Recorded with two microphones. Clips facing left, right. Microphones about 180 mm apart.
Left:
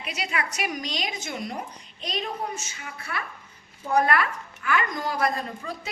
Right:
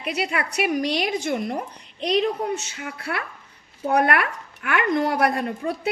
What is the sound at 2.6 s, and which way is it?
A woman's voice, 65° right (ahead or behind).